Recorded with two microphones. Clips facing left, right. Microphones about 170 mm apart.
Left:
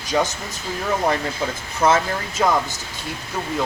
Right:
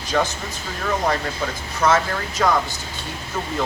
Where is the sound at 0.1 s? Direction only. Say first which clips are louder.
Left 1 dB; 15° left (ahead or behind).